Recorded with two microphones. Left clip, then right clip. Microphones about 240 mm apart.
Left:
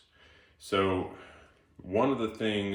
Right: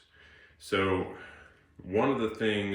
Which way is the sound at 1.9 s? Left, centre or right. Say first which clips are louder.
Even; centre.